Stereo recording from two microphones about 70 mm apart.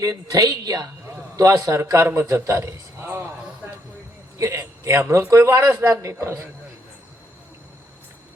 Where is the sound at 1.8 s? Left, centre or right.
Right.